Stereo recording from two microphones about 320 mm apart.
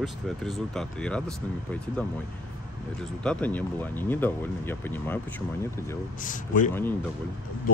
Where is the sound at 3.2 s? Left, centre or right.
Centre.